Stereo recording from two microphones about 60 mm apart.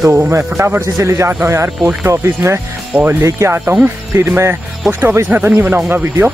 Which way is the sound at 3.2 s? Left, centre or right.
Right.